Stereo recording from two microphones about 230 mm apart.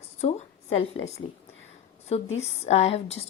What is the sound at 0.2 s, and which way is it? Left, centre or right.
A woman's voice, left.